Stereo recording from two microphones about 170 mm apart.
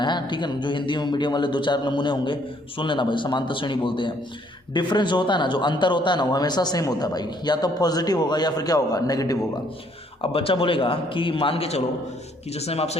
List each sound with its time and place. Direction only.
0.0 s a man's voice: 25° left (ahead or behind)
10.2 s a man's voice: 35° left (ahead or behind)